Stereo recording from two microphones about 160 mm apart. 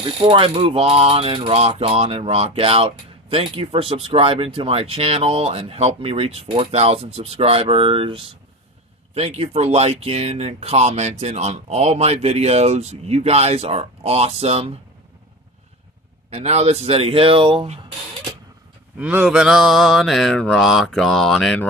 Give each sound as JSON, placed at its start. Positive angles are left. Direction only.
{"t": 0.0, "sound": "mechanisms", "side_deg": -35}
{"t": 16.3, "sound": "mechanisms", "side_deg": -40}
{"t": 18.9, "sound": "mantra", "side_deg": -10}